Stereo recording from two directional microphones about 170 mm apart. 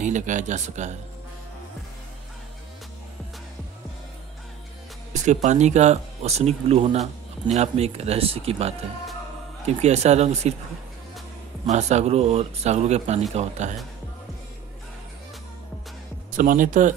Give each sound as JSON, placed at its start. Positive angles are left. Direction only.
{"t": 0.0, "sound": "speech", "side_deg": -45}
{"t": 5.1, "sound": "speech", "side_deg": -45}
{"t": 11.6, "sound": "speech", "side_deg": -40}
{"t": 16.3, "sound": "speech", "side_deg": -50}